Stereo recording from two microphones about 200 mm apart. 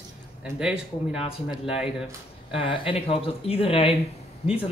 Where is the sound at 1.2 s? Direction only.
30° left (ahead or behind).